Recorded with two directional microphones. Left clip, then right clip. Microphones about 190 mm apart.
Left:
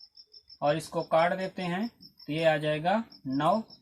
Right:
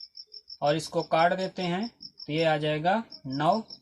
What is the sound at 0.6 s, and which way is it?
Speech, 30° right (ahead or behind).